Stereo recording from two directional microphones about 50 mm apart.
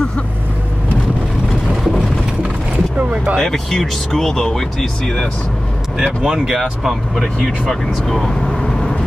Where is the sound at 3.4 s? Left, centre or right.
Centre.